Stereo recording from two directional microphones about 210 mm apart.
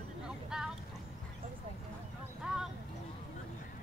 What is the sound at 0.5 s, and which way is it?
Vehicle, centre (ahead or behind).